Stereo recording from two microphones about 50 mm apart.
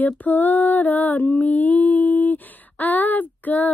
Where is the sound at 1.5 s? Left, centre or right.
Left.